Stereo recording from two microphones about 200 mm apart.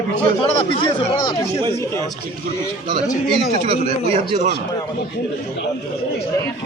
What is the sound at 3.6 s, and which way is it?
Speech, 25° right (ahead or behind).